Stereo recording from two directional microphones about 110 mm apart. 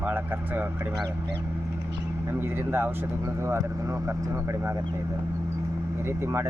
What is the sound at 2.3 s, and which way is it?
Speech, 20° right (ahead or behind).